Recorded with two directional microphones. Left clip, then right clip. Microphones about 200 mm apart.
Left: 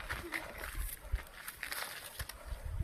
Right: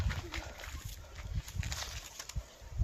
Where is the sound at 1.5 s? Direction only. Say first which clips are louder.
Left 1 dB; 35° left (ahead or behind).